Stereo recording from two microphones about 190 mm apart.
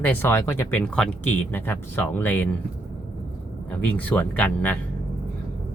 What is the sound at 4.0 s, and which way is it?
Speech, 10° left (ahead or behind).